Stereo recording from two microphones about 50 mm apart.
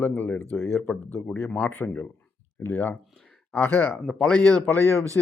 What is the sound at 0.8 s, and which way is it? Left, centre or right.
Speech, left.